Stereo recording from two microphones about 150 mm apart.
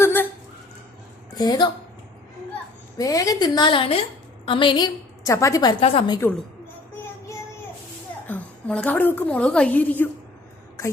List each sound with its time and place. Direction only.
0.0 s a sound: 15° left (ahead or behind)
1.4 s a woman's voice: 30° left (ahead or behind)
3.0 s a woman's voice: 25° left (ahead or behind)
5.8 s a woman's voice: 40° left (ahead or behind)
6.1 s a woman's voice: 20° left (ahead or behind)
8.3 s a woman's voice: 10° left (ahead or behind)